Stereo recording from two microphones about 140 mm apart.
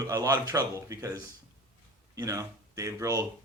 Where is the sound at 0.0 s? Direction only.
25° right (ahead or behind).